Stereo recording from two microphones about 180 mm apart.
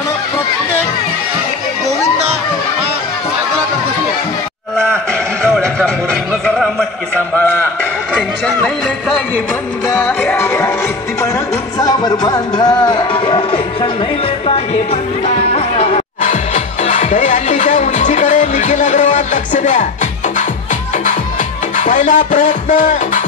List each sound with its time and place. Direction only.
6.4 s speech: centre (ahead or behind)
10.0 s music: 15° left (ahead or behind)
11.8 s music: 25° left (ahead or behind)
15.2 s music: 35° left (ahead or behind)
21.7 s music: 45° left (ahead or behind)